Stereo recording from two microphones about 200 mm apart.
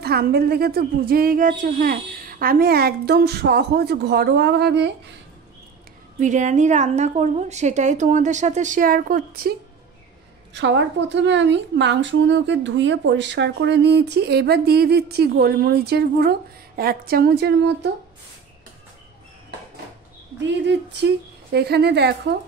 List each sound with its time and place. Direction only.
0.0 s a woman's voice: 50° right (ahead or behind)
6.1 s a woman's voice: 40° right (ahead or behind)
10.5 s a woman's voice: 60° right (ahead or behind)
20.3 s a woman's voice: 60° right (ahead or behind)